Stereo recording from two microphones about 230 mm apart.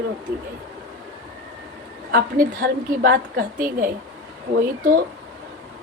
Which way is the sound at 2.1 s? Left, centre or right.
Right.